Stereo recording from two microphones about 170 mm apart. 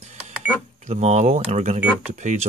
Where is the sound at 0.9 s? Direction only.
40° right (ahead or behind).